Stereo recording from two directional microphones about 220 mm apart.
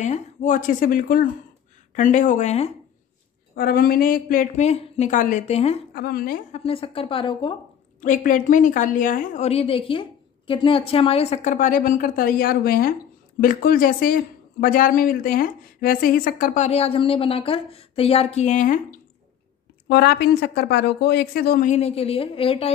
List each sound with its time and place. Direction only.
0.0 s speech: 35° left (ahead or behind)
3.5 s speech: 40° left (ahead or behind)
5.9 s speech: 45° left (ahead or behind)
6.6 s speech: 25° left (ahead or behind)
8.0 s speech: 35° left (ahead or behind)
19.9 s speech: 45° left (ahead or behind); by 22.7 s 25° left (ahead or behind)